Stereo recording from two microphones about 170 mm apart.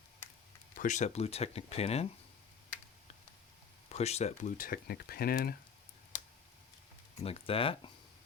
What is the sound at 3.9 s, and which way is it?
Speech, 40° left (ahead or behind).